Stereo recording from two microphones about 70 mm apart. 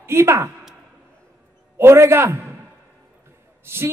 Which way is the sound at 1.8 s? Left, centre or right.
Right.